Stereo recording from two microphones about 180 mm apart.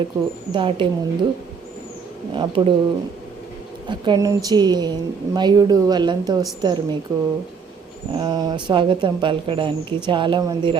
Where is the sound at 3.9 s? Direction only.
25° right (ahead or behind).